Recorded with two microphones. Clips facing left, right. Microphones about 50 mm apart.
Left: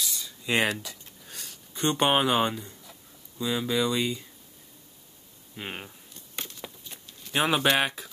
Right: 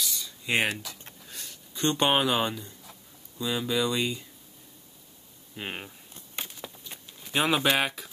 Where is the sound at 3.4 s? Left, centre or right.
Centre.